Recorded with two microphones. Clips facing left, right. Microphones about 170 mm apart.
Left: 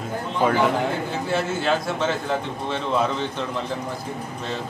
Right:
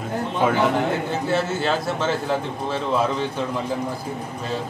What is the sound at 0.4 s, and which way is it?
Speech, centre (ahead or behind).